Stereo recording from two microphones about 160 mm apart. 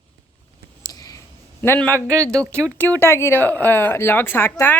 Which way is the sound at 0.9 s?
20° left (ahead or behind).